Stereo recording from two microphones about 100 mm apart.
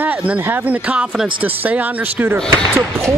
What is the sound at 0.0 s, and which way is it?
Speech, 15° right (ahead or behind).